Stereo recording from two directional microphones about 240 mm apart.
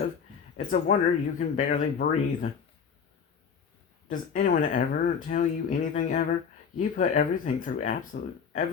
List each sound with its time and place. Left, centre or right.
0.5 s speech: left
4.1 s speech: left